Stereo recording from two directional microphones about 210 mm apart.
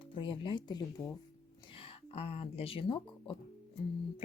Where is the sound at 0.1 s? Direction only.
25° left (ahead or behind).